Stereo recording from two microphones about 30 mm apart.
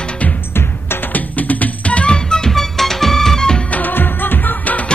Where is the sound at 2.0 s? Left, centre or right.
Left.